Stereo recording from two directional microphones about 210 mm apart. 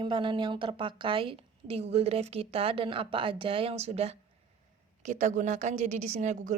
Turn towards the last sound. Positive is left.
turn(degrees=-35)  # may be behind; listen again after turning